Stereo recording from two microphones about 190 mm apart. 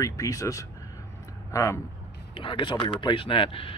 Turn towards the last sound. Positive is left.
turn(degrees=30)  # may be behind; listen again after turning